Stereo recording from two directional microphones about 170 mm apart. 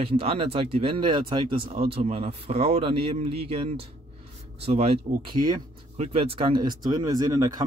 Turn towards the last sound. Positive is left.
turn(degrees=-20)  # may be behind; listen again after turning